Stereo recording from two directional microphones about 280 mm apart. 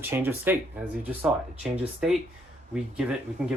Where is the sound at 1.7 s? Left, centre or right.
Centre.